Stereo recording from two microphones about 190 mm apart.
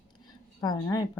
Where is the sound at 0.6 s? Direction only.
20° left (ahead or behind).